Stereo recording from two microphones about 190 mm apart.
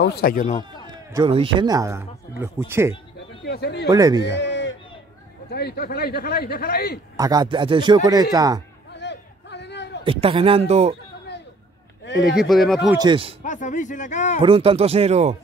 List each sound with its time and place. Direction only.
0.0 s speech: 55° left (ahead or behind)
1.1 s speech: 25° right (ahead or behind)
3.4 s speech: 60° left (ahead or behind)
3.9 s speech: 20° right (ahead or behind)
4.2 s a sound: 65° left (ahead or behind)
5.5 s a man's voice: 60° left (ahead or behind)
7.2 s speech: 20° right (ahead or behind)
8.9 s a sound: 65° left (ahead or behind)
10.0 s speech: 30° right (ahead or behind)
12.4 s speech: centre (ahead or behind)
12.9 s speech: 25° right (ahead or behind)
13.4 s speech: 40° left (ahead or behind)
14.4 s speech: 30° right (ahead or behind)